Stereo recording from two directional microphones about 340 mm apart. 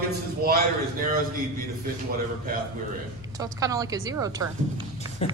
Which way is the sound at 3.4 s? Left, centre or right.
Centre.